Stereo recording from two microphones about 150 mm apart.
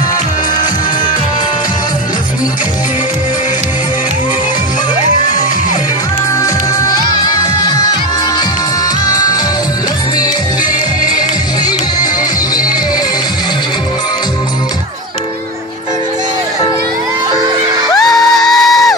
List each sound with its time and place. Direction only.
9.0 s music: 25° left (ahead or behind)
11.1 s music: 25° left (ahead or behind)
18.0 s music: centre (ahead or behind)